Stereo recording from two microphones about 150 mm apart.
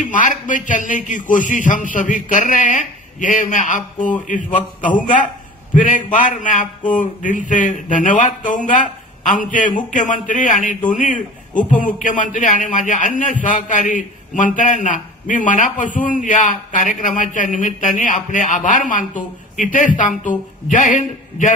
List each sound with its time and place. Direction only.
0.0 s a man's voice: 60° left (ahead or behind)